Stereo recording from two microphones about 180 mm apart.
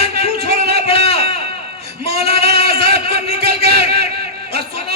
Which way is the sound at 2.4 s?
60° right (ahead or behind).